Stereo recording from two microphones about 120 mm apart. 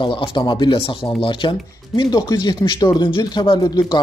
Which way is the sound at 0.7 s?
55° left (ahead or behind).